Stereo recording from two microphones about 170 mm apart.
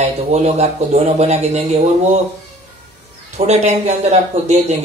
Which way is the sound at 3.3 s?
40° right (ahead or behind).